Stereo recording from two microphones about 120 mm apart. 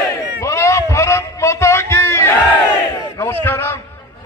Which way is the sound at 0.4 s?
25° left (ahead or behind).